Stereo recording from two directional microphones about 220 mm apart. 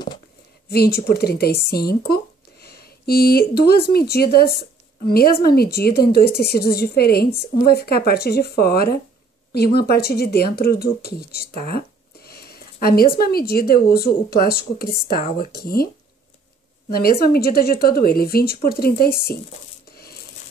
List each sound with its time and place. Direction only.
0.7 s a woman's voice: 45° left (ahead or behind)
16.9 s a woman's voice: 45° left (ahead or behind)